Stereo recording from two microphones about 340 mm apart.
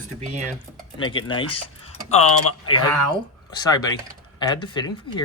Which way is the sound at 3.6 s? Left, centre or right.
Centre.